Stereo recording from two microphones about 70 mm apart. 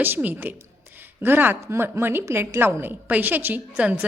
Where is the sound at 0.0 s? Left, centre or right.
Right.